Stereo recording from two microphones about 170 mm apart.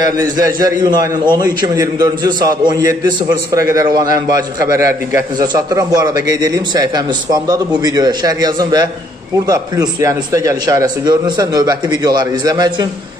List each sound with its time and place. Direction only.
0.2 s a man's voice: 20° right (ahead or behind)